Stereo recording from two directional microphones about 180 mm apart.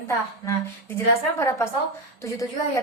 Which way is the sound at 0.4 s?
15° left (ahead or behind).